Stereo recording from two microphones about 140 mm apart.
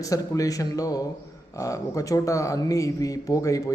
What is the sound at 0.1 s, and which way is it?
Speech, 25° left (ahead or behind).